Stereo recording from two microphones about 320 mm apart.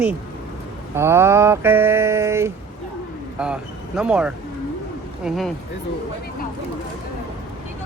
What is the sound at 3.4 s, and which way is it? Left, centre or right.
A man's voice, centre.